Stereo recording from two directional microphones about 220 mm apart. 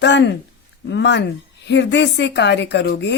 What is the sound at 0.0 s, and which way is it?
Speech, 50° left (ahead or behind).